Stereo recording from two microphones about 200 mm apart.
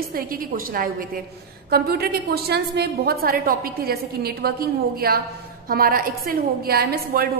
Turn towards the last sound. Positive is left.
turn(degrees=-50)  # may be behind; listen again after turning